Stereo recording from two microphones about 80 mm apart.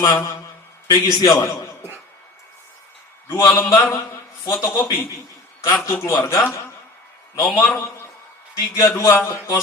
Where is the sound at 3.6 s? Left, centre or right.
Left.